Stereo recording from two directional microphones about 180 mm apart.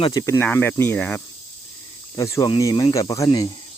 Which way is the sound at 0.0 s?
20° left (ahead or behind).